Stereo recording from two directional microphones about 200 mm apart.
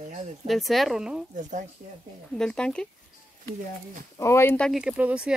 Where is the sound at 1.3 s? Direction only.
40° right (ahead or behind).